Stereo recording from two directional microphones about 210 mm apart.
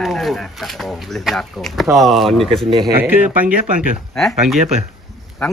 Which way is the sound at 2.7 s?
25° right (ahead or behind).